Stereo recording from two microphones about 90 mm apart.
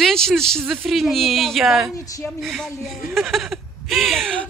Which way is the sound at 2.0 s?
40° left (ahead or behind).